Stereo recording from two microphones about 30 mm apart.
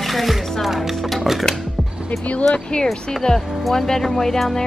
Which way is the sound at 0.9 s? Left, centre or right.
Centre.